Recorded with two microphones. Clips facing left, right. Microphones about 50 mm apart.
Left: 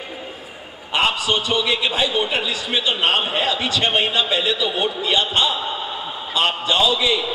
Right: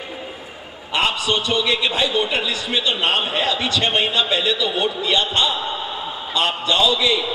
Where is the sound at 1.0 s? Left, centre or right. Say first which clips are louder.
Even; centre.